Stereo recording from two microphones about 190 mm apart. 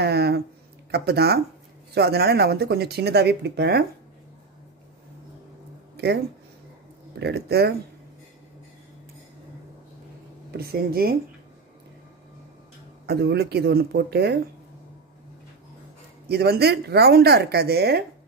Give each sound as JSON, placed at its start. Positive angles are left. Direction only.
{"t": 0.0, "sound": "speech", "side_deg": -60}
{"t": 7.2, "sound": "speech", "side_deg": -60}
{"t": 10.5, "sound": "speech", "side_deg": -55}
{"t": 13.0, "sound": "speech", "side_deg": -55}
{"t": 16.3, "sound": "speech", "side_deg": -55}